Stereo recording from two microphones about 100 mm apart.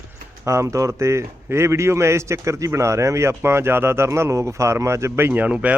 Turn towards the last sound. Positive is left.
turn(degrees=-15)  # may be behind; listen again after turning